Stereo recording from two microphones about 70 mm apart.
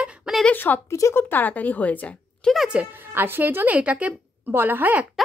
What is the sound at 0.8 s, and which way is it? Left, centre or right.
Speech, left.